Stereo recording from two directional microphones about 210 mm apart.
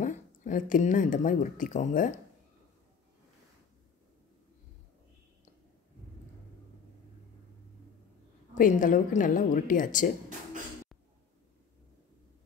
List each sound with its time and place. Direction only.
0.0 s speech: 35° left (ahead or behind)
8.5 s a woman's voice: 40° left (ahead or behind)